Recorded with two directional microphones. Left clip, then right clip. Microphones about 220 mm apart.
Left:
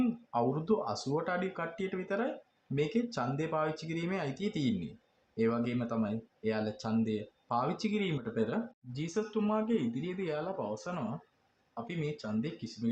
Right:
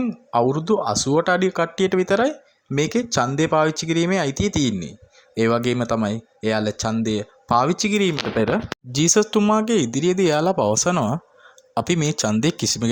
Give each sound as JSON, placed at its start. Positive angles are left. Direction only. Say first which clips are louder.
{"t": 0.3, "sound": "speech", "louder": "right 14 dB", "side_deg": -35}
{"t": 8.9, "sound": "speech", "louder": "right 19 dB", "side_deg": -55}